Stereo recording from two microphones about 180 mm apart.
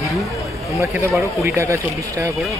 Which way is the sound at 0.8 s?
15° right (ahead or behind).